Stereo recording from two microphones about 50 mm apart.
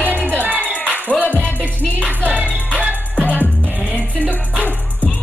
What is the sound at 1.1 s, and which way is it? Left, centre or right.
Music, right.